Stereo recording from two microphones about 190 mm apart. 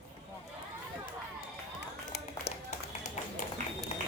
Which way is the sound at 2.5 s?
60° left (ahead or behind).